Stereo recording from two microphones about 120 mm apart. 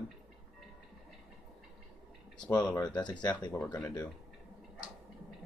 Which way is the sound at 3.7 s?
25° left (ahead or behind).